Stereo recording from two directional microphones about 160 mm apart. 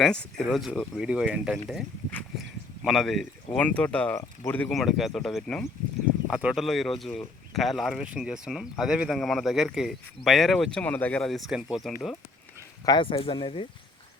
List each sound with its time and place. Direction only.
0.0 s speech: 5° left (ahead or behind)
2.8 s speech: centre (ahead or behind)
4.7 s speech: centre (ahead or behind)
12.8 s speech: 30° left (ahead or behind)